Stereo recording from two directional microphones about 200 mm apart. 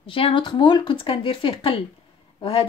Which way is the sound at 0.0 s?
25° left (ahead or behind).